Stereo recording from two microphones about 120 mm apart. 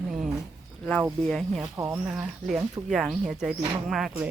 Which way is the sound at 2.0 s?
5° right (ahead or behind).